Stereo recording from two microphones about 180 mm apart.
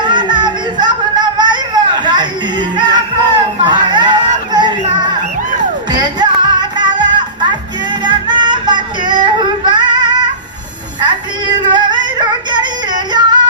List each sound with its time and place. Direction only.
0.0 s music: 25° right (ahead or behind)